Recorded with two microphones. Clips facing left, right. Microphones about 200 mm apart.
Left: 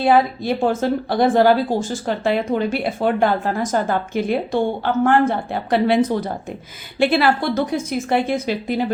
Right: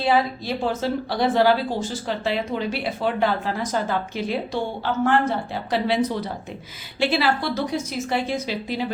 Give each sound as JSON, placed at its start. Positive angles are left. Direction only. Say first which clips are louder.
{"t": 0.0, "sound": "a woman's voice", "louder": "left 5 dB", "side_deg": 50}